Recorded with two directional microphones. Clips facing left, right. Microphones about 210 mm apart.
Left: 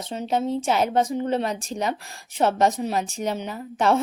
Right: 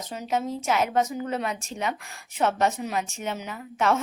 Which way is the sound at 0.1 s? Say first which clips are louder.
Left 4 dB; 30° left (ahead or behind).